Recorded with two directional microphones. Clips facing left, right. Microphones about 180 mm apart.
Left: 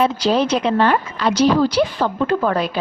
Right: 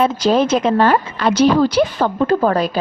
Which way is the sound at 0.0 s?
45° right (ahead or behind).